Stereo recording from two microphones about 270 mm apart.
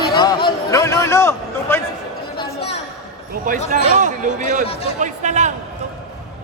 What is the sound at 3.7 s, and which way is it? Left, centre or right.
A man's voice, right.